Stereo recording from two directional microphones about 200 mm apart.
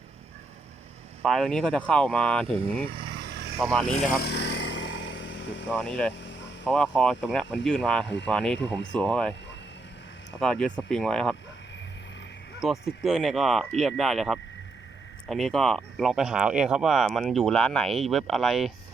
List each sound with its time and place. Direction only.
1.2 s speech: 5° left (ahead or behind)
2.9 s vehicle: 55° right (ahead or behind)
3.6 s speech: centre (ahead or behind)
4.2 s a sound: 55° left (ahead or behind)
5.7 s speech: 5° left (ahead or behind)
6.1 s hum: 65° left (ahead or behind)
6.7 s speech: 5° left (ahead or behind)
8.0 s speech: 60° left (ahead or behind)
8.3 s speech: 5° left (ahead or behind)
8.5 s speech: 60° left (ahead or behind)
8.9 s speech: 5° left (ahead or behind)
10.4 s speech: 5° left (ahead or behind)
12.5 s speech: centre (ahead or behind)